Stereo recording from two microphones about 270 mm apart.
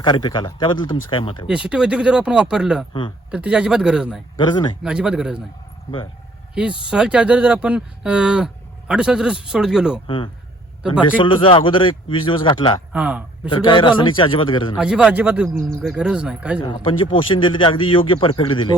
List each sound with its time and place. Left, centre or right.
0.0 s a man's voice: centre
1.5 s speech: centre
4.4 s a man's voice: centre
4.8 s speech: centre
6.5 s speech: centre
11.2 s speech: centre
12.9 s a man's voice: centre
13.5 s a man's voice: centre
14.8 s speech: centre
17.2 s speech: centre